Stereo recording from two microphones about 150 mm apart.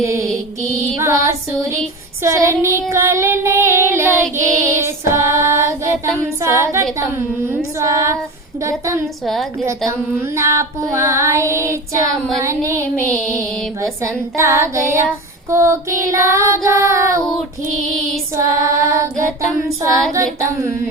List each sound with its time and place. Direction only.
0.0 s music: 20° right (ahead or behind)
0.3 s music: centre (ahead or behind)
1.0 s child singing: 20° right (ahead or behind)
6.4 s female singing: 20° right (ahead or behind)
7.8 s child singing: 20° right (ahead or behind)
9.2 s music: centre (ahead or behind)
9.6 s child singing: 20° right (ahead or behind)
16.6 s music: 15° right (ahead or behind)
18.3 s child singing: 20° right (ahead or behind)